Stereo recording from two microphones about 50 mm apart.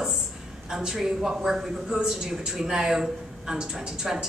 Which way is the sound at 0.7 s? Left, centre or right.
Centre.